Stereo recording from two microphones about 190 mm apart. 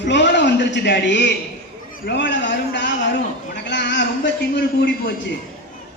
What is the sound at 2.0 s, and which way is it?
A man's voice, 65° left (ahead or behind).